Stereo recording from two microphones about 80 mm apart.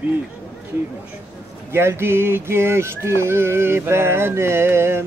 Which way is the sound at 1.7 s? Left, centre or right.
Right.